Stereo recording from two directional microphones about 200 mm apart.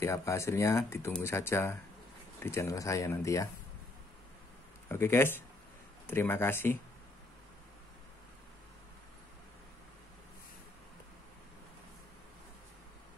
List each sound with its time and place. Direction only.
0.0 s speech: 15° left (ahead or behind)
4.8 s speech: 10° left (ahead or behind)